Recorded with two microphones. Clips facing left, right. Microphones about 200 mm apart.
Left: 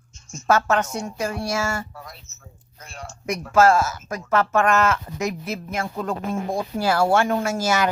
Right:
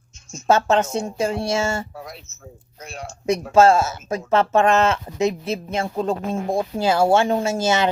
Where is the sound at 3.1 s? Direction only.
35° right (ahead or behind).